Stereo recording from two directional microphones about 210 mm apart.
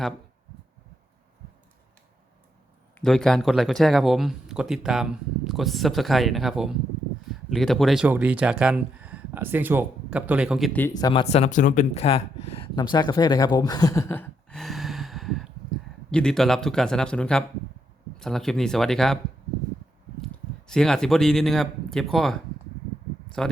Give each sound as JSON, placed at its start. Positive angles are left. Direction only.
{"t": 3.0, "sound": "speech", "side_deg": 0}
{"t": 10.7, "sound": "speech", "side_deg": 10}
{"t": 20.3, "sound": "speech", "side_deg": 5}
{"t": 23.4, "sound": "speech", "side_deg": 5}